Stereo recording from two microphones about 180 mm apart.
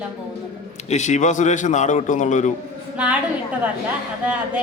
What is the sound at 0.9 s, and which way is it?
A man's voice, 40° left (ahead or behind).